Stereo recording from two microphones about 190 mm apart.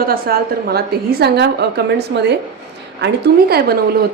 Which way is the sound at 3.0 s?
55° right (ahead or behind).